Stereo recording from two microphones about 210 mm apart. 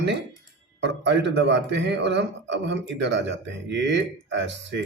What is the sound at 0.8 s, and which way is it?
Speech, 55° right (ahead or behind).